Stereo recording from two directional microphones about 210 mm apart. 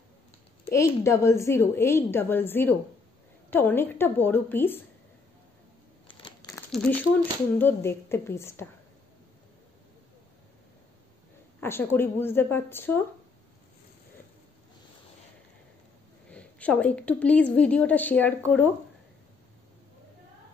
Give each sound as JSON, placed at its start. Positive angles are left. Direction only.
{"t": 0.7, "sound": "a woman's voice", "side_deg": 15}
{"t": 6.0, "sound": "a sound", "side_deg": 20}
{"t": 6.7, "sound": "a woman's voice", "side_deg": 5}
{"t": 11.6, "sound": "a woman's voice", "side_deg": 10}
{"t": 16.3, "sound": "a woman's voice", "side_deg": 5}